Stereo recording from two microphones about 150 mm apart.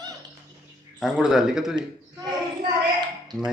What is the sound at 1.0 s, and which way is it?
Speech, 5° right (ahead or behind).